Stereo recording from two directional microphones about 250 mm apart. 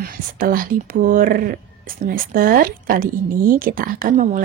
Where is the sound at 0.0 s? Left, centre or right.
Right.